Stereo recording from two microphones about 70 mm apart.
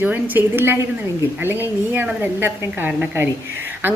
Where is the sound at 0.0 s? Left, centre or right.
Right.